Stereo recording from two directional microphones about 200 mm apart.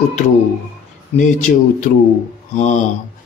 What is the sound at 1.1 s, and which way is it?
Speech, 40° left (ahead or behind).